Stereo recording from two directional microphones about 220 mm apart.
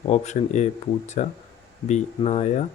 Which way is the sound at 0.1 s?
30° left (ahead or behind).